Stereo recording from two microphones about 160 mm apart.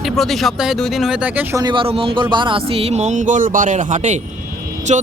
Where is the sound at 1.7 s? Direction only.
35° right (ahead or behind).